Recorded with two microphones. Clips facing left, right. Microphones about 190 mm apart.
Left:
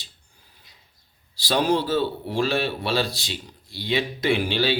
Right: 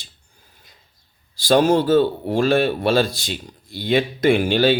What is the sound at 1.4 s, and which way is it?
Speech, 50° right (ahead or behind).